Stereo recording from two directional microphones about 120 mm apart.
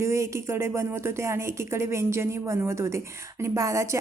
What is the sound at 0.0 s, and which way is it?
A woman's voice, 25° right (ahead or behind).